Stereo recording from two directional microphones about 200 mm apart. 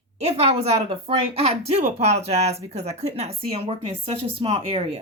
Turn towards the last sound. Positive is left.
turn(degrees=-30)  # may be behind; listen again after turning